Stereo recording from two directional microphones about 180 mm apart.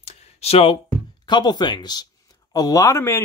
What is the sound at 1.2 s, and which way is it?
Speech, 25° left (ahead or behind).